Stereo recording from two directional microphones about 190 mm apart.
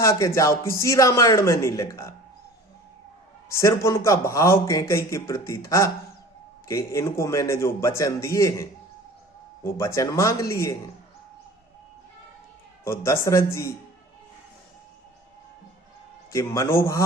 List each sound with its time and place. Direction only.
0.0 s a man's voice: 15° left (ahead or behind)
3.5 s a man's voice: 15° left (ahead or behind)
9.6 s a man's voice: 15° left (ahead or behind)
12.8 s a man's voice: 15° left (ahead or behind)
16.3 s a man's voice: 15° left (ahead or behind)